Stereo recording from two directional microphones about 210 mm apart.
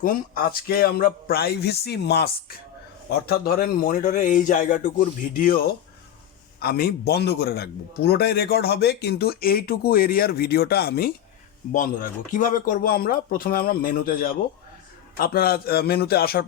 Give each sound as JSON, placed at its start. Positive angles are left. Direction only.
{"t": 0.0, "sound": "a man's voice", "side_deg": 45}
{"t": 6.6, "sound": "a man's voice", "side_deg": 45}